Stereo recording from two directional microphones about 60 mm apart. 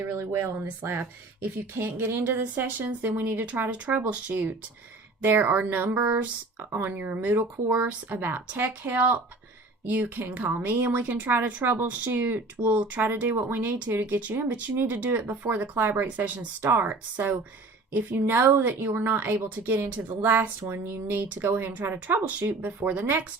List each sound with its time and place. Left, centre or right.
0.0 s speech: right